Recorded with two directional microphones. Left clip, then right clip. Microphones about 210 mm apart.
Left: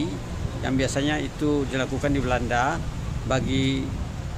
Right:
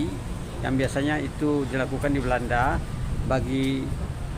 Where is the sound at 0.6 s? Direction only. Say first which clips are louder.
Left 1 dB; centre (ahead or behind).